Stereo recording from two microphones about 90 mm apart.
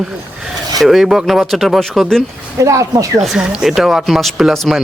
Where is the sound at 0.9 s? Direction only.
5° right (ahead or behind).